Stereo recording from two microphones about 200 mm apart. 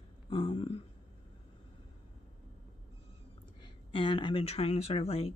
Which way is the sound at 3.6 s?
25° left (ahead or behind).